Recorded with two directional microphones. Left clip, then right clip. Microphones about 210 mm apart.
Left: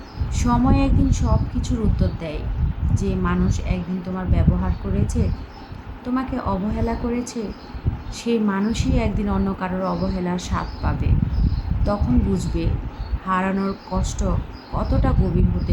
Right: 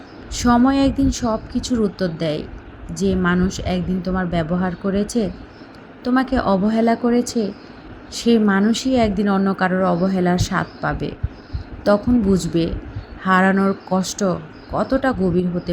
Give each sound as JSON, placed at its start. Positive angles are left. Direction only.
{"t": 0.3, "sound": "a woman's voice", "side_deg": -25}